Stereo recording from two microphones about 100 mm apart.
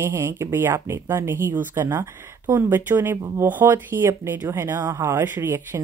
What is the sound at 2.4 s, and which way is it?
Speech, 35° right (ahead or behind).